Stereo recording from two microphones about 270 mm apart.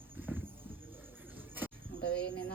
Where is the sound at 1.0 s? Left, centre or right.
Centre.